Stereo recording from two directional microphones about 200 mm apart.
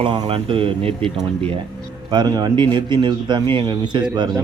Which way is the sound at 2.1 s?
20° right (ahead or behind).